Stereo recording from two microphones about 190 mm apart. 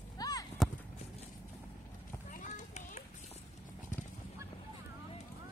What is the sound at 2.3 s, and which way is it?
Children playing, 45° left (ahead or behind).